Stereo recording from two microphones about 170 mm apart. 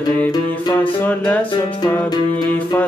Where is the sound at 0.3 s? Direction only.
25° left (ahead or behind).